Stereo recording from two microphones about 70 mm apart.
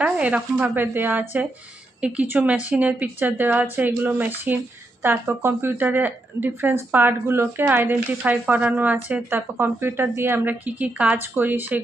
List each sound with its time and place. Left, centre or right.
0.0 s a woman's voice: centre
2.0 s a woman's voice: centre